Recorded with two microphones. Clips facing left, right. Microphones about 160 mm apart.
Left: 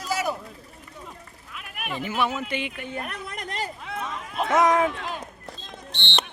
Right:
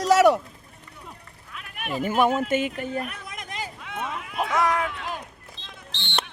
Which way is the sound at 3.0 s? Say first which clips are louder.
Left 2 dB; 60° left (ahead or behind).